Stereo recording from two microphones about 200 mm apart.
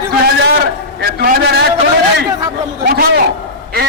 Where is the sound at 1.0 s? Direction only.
50° right (ahead or behind).